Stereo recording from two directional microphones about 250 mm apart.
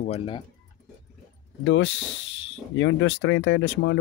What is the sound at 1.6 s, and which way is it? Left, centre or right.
Speech, left.